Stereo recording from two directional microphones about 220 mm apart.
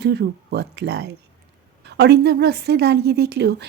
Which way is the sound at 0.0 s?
50° right (ahead or behind).